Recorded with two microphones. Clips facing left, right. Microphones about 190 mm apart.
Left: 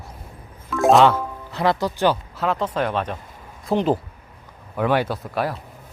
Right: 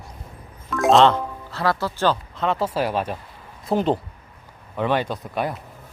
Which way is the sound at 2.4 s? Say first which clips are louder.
Even; 5° right (ahead or behind).